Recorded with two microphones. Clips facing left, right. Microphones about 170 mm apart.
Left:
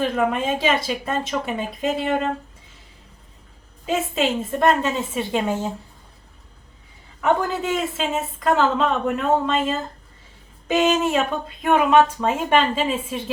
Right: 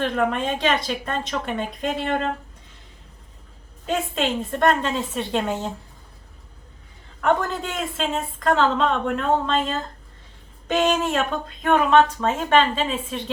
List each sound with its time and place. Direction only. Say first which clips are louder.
0.0 s a woman's voice: left 1 dB; 5° left (ahead or behind)
3.8 s a woman's voice: left 2 dB; 5° left (ahead or behind)
7.2 s a woman's voice: left 1 dB; 5° left (ahead or behind)